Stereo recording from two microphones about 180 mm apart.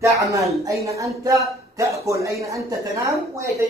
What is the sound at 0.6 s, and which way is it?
A man's voice, 15° right (ahead or behind).